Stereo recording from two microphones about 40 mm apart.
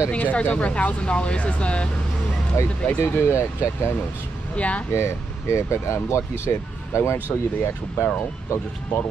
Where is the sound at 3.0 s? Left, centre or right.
Left.